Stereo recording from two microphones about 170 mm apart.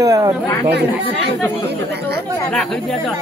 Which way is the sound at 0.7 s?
80° right.